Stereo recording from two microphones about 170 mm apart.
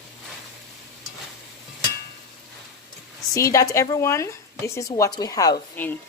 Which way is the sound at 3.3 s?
20° left (ahead or behind).